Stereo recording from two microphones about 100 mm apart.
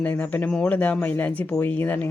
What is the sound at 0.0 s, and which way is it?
Speech, 15° left (ahead or behind).